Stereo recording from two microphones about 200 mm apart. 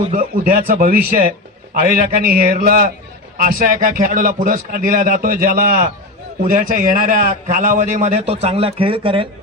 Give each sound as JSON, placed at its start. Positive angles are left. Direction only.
{"t": 0.2, "sound": "a man's voice", "side_deg": -45}